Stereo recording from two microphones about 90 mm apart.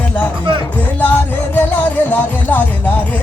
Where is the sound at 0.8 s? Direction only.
20° left (ahead or behind).